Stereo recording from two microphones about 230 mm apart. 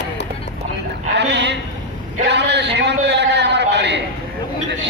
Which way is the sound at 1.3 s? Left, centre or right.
Right.